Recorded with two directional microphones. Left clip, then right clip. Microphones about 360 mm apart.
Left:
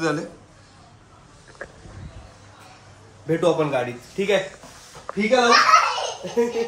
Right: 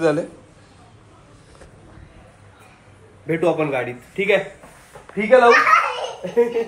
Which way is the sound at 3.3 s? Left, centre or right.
Centre.